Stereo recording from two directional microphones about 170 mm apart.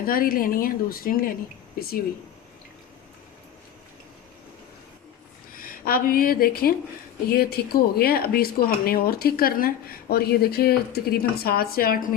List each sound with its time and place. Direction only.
0.0 s speech: 60° left (ahead or behind)
5.5 s speech: 60° left (ahead or behind)